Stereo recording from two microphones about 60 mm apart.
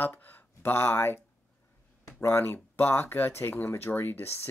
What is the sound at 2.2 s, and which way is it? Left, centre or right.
Speech, left.